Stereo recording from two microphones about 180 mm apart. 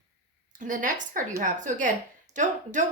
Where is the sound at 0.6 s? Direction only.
45° right (ahead or behind).